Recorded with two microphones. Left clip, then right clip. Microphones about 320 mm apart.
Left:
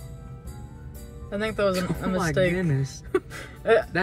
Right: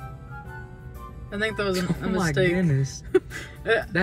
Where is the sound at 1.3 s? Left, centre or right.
Centre.